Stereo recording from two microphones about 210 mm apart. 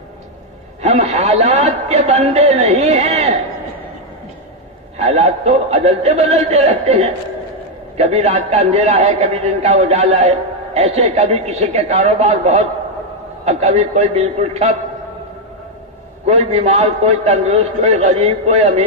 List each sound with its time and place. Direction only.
0.8 s a man's voice: 30° right (ahead or behind)
4.9 s a man's voice: 30° right (ahead or behind)
16.2 s a man's voice: 30° right (ahead or behind)